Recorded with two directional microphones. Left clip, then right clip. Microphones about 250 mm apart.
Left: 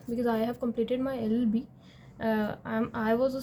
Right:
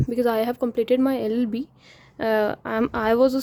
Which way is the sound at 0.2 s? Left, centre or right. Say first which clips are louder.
Right 8 dB; right.